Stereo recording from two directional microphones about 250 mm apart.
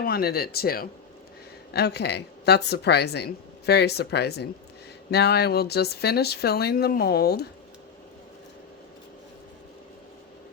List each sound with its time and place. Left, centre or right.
0.0 s speech: left